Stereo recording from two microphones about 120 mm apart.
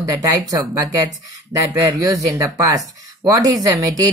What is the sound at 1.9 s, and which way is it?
Speech, 30° right (ahead or behind).